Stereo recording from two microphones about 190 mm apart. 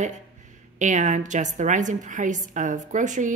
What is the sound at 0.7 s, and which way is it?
A woman's voice, 40° right (ahead or behind).